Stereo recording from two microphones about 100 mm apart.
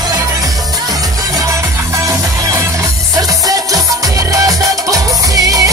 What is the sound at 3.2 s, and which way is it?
Music, 35° right (ahead or behind).